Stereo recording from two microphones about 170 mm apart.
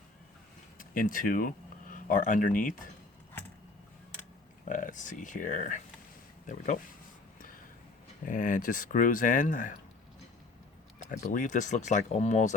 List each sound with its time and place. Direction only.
0.8 s speech: 55° left (ahead or behind)
4.7 s speech: 50° left (ahead or behind)
8.2 s speech: 50° left (ahead or behind)
11.0 s speech: 45° left (ahead or behind)